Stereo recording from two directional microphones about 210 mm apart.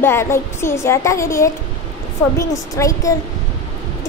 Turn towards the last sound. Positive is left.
turn(degrees=15)  # may be behind; listen again after turning